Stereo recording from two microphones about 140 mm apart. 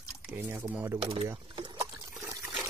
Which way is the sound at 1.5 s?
40° right (ahead or behind).